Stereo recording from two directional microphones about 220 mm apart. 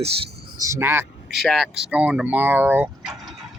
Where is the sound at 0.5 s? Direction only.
15° right (ahead or behind).